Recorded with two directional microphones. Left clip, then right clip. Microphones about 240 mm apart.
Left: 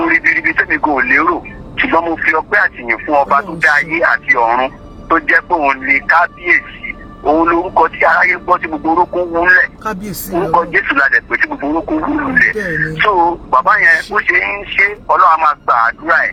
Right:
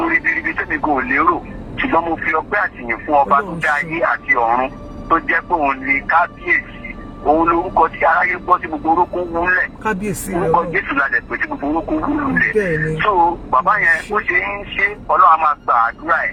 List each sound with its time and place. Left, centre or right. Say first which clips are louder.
0.0 s speech: left 5 dB; left